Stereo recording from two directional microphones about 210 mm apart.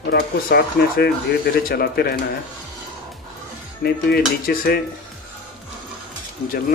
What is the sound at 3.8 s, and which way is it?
Speech, 45° left (ahead or behind).